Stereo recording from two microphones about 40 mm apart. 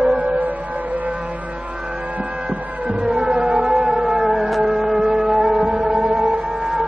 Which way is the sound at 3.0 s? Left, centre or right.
Right.